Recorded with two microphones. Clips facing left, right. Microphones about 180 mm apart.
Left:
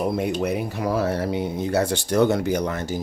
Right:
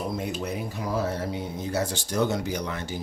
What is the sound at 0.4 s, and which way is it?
Speech, 65° left (ahead or behind).